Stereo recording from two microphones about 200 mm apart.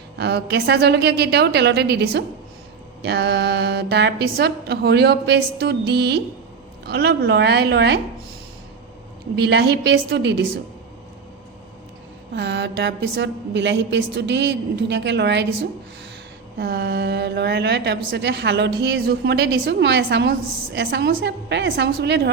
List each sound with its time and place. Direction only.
0.2 s a woman's voice: 55° right (ahead or behind)
9.3 s a woman's voice: 55° right (ahead or behind)
12.3 s a woman's voice: 60° right (ahead or behind)
16.6 s a woman's voice: 50° right (ahead or behind)